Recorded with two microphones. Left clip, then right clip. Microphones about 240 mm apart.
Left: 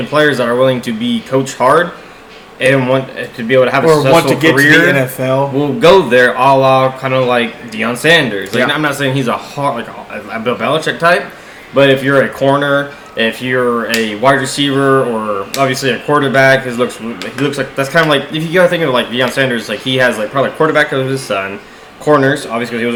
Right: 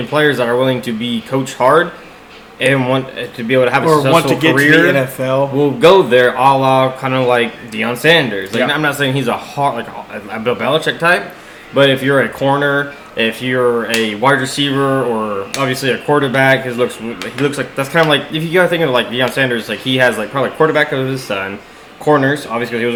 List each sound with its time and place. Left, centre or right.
0.1 s speech: right
4.1 s speech: left
5.5 s speech: right